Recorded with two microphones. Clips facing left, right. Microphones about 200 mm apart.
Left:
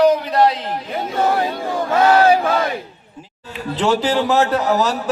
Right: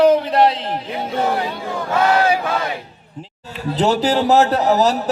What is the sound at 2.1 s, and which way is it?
Battle cry, 50° left (ahead or behind).